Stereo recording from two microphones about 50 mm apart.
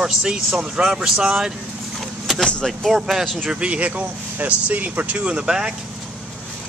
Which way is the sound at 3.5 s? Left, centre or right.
Right.